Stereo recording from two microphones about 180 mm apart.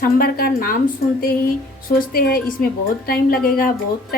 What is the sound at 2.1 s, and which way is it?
Speech, 55° left (ahead or behind).